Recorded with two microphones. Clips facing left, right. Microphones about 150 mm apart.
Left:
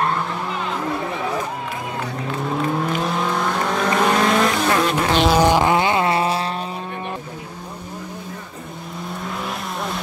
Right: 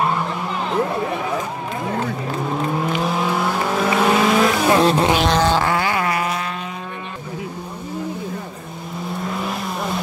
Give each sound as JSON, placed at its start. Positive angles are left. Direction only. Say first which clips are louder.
{"t": 2.7, "sound": "vehicle", "louder": "right 1 dB", "side_deg": 0}
{"t": 4.6, "sound": "vehicle", "louder": "right 4 dB", "side_deg": -30}
{"t": 5.3, "sound": "vehicle", "louder": "left 2 dB", "side_deg": 15}
{"t": 9.3, "sound": "vehicle", "louder": "right 3 dB", "side_deg": 0}